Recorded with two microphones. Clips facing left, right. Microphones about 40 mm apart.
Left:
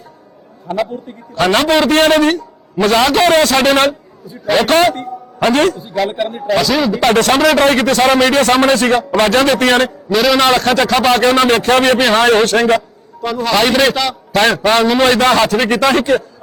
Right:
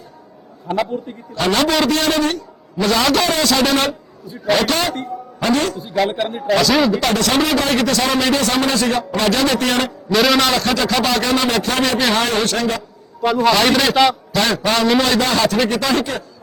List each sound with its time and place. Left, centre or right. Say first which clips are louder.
0.8 s a man's voice: left 2 dB; centre
1.4 s a man's voice: left 4 dB; left
5.8 s a man's voice: left 1 dB; centre
7.0 s a man's voice: left 6 dB; left
10.1 s a man's voice: left 1 dB; centre
10.5 s a man's voice: left 5 dB; left
13.2 s a man's voice: even; centre
14.3 s a man's voice: left 5 dB; left